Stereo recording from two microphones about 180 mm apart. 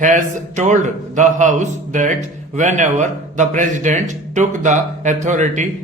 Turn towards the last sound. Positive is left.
turn(degrees=-40)  # may be behind; listen again after turning